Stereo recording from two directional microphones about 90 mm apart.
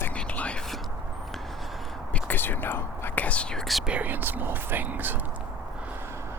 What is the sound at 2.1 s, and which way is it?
Speech, 20° left (ahead or behind).